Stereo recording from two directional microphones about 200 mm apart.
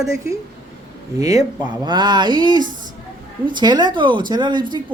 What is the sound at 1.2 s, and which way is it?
Speech, 15° right (ahead or behind).